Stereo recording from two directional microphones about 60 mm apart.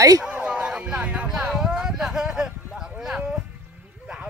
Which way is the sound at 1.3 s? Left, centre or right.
Centre.